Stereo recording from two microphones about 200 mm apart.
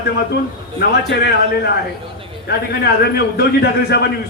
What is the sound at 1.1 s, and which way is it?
A man's voice, 55° left (ahead or behind).